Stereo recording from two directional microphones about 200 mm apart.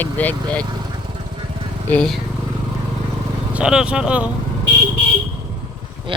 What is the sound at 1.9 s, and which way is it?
Speech, 5° left (ahead or behind).